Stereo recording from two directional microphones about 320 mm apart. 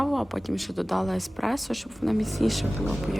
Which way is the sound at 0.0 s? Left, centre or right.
Centre.